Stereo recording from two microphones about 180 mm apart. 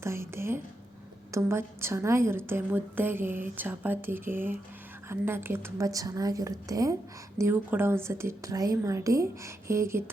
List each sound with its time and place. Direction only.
0.0 s a woman's voice: 15° right (ahead or behind)